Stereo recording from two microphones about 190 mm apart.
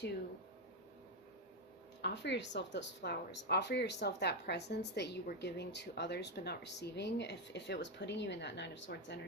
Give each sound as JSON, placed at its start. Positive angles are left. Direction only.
{"t": 2.0, "sound": "a woman's voice", "side_deg": 65}